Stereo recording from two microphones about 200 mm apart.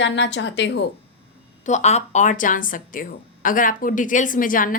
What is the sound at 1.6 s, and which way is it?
Speech, 35° left (ahead or behind).